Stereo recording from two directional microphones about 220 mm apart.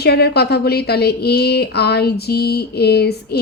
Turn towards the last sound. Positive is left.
turn(degrees=45)  # may be behind; listen again after turning